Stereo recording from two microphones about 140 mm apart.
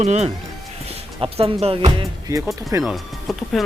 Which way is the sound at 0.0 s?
55° right (ahead or behind).